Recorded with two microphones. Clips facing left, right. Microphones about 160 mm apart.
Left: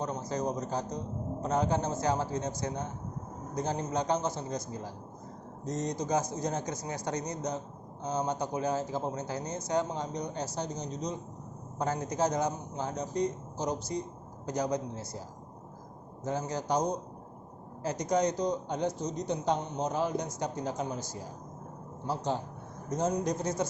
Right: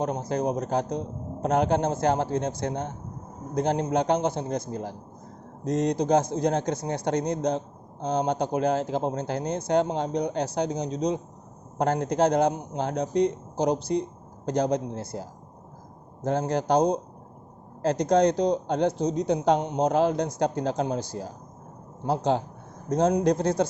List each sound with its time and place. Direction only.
0.0 s a man's voice: 60° right (ahead or behind); by 11.2 s 80° right
11.8 s a man's voice: 65° right (ahead or behind); by 20.2 s 85° right
20.4 s a man's voice: 70° right (ahead or behind)